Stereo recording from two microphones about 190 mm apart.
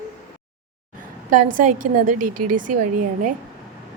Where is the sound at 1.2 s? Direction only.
45° right (ahead or behind).